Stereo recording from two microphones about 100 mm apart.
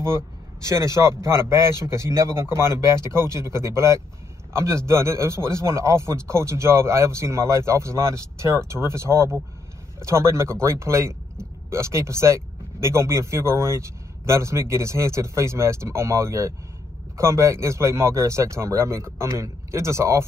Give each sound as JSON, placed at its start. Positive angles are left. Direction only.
{"t": 0.0, "sound": "speech", "side_deg": -30}